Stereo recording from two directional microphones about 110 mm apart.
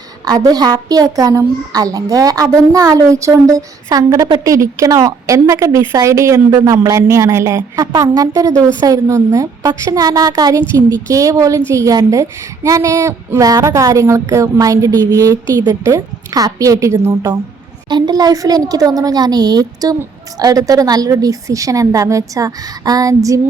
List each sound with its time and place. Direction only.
0.3 s a woman's voice: 35° right (ahead or behind)
7.8 s a woman's voice: 35° right (ahead or behind)
17.8 s a woman's voice: 40° right (ahead or behind)